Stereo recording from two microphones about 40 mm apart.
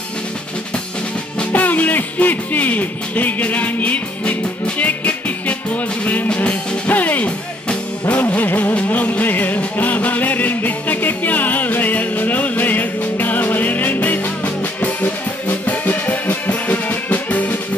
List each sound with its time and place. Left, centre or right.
1.5 s music: left
8.4 s music: left